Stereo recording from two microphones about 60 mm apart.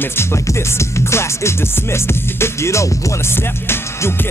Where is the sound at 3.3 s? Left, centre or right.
Left.